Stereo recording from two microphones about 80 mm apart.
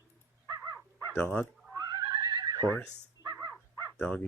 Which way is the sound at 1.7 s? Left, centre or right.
Right.